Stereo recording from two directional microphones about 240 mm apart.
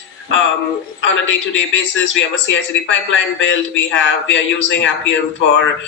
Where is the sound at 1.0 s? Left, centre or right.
Left.